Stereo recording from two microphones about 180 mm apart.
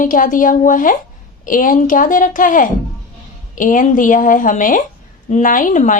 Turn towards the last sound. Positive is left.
turn(degrees=45)  # may be behind; listen again after turning